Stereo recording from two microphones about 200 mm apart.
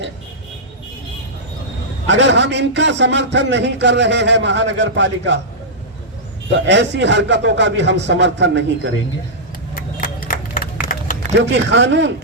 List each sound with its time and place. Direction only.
2.0 s a man's voice: 60° right (ahead or behind)
6.7 s a man's voice: 60° right (ahead or behind)
9.7 s a sound: 45° left (ahead or behind)
11.3 s a man's voice: 60° right (ahead or behind)